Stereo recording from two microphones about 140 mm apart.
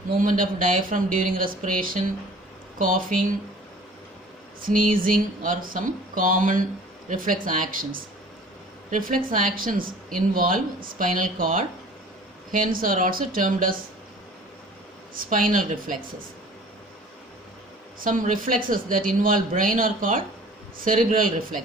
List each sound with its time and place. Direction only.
0.2 s speech: 75° right (ahead or behind)
4.6 s speech: 80° right
15.1 s speech: 80° right
18.0 s speech: 75° right (ahead or behind)